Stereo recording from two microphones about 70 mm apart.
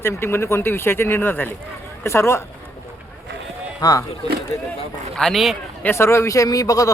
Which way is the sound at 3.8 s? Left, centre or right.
Left.